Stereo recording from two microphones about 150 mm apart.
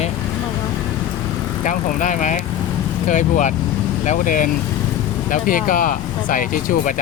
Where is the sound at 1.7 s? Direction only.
55° left (ahead or behind).